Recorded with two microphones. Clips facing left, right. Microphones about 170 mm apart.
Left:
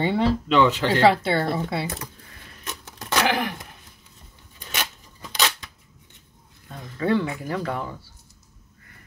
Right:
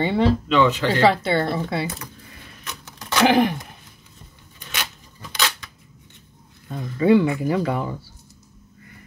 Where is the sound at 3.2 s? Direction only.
20° right (ahead or behind).